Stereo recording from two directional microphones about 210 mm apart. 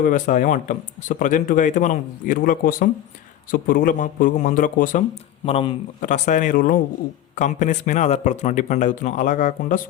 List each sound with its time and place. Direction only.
0.0 s speech: 40° left (ahead or behind)
5.5 s speech: 25° left (ahead or behind)